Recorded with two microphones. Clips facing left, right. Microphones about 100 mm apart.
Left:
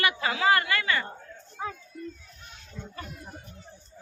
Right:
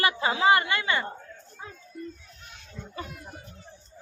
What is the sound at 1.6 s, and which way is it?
Speech, 90° left.